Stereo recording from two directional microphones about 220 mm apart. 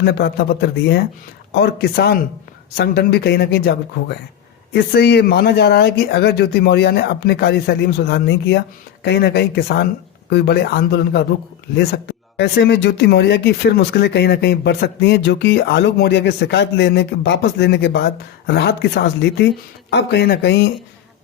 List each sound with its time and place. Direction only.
0.0 s speech: 45° left (ahead or behind)